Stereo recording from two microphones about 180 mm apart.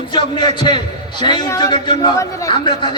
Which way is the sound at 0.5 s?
25° left (ahead or behind).